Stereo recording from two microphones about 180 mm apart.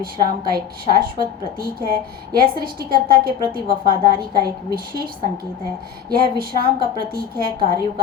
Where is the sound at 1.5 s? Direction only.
55° right (ahead or behind).